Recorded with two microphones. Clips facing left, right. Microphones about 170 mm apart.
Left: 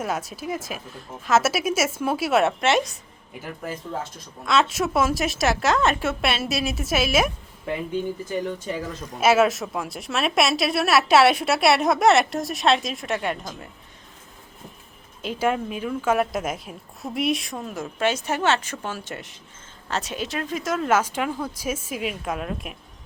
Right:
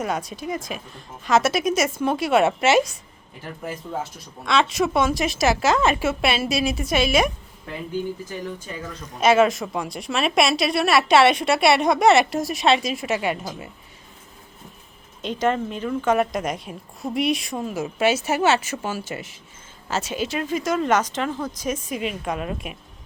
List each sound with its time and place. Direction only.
0.0 s a woman's voice: 5° left (ahead or behind)
4.4 s a woman's voice: centre (ahead or behind)
9.2 s a woman's voice: 5° left (ahead or behind)
15.2 s a woman's voice: 5° left (ahead or behind)